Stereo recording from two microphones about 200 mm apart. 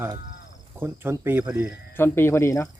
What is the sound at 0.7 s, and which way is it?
Speech, 10° right (ahead or behind).